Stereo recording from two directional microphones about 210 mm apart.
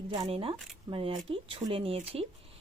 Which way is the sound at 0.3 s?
25° right (ahead or behind).